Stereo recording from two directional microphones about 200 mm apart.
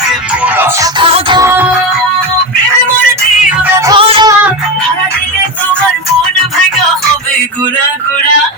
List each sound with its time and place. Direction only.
0.4 s music: 10° right (ahead or behind)
0.9 s music: 25° right (ahead or behind)
3.8 s music: 25° right (ahead or behind)